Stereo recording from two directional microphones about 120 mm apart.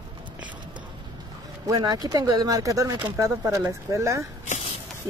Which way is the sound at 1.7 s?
35° right (ahead or behind).